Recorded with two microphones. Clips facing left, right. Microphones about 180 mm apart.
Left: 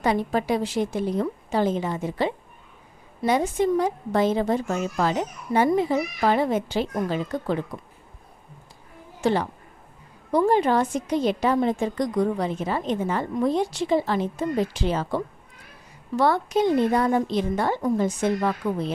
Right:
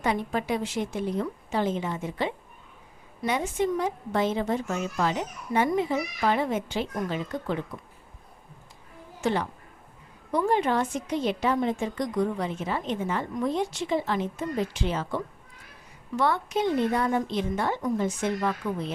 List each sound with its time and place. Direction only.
0.0 s a woman's voice: 35° left (ahead or behind)
9.2 s a woman's voice: 35° left (ahead or behind)